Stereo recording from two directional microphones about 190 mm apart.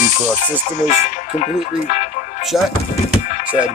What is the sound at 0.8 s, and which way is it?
Speech, 40° left (ahead or behind).